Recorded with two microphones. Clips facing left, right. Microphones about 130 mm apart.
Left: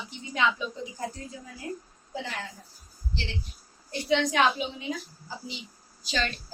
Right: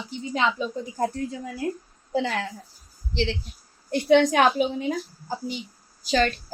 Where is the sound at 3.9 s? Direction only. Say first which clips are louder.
Right 8 dB; 55° right (ahead or behind).